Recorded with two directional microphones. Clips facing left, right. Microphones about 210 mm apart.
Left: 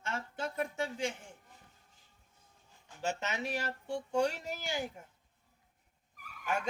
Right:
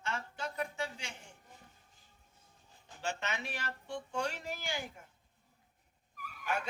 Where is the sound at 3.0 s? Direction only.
40° left (ahead or behind).